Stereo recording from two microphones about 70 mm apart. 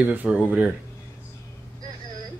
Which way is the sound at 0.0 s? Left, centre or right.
Right.